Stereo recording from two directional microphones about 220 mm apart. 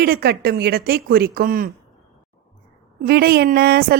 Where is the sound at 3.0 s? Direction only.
45° right (ahead or behind).